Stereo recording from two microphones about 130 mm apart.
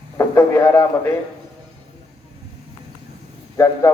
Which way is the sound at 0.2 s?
20° left (ahead or behind).